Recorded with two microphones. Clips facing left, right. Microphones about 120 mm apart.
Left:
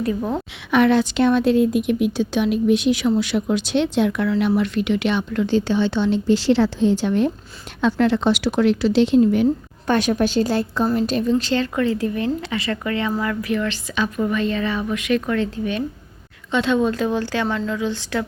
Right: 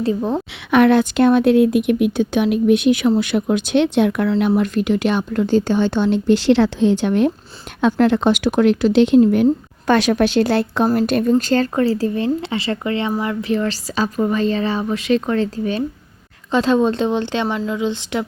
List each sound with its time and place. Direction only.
0.0 s speech: 25° right (ahead or behind)
0.7 s speech: 55° right (ahead or behind)
4.4 s speech: 50° right (ahead or behind)
9.8 s a woman's voice: 90° right; by 10.8 s 70° right (ahead or behind)
10.9 s a woman's voice: 60° right (ahead or behind); by 18.3 s 20° right (ahead or behind)